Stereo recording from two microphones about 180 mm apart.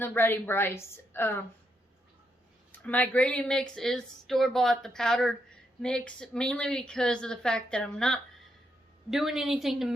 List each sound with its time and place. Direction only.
0.0 s a woman's voice: 10° left (ahead or behind)
2.7 s speech: 10° left (ahead or behind)